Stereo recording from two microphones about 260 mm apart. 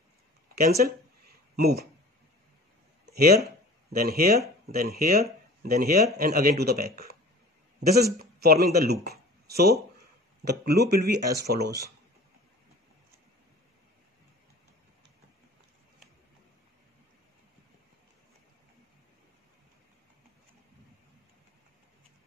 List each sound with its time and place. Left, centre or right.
0.6 s speech: right
3.1 s a sound: right
3.9 s speech: right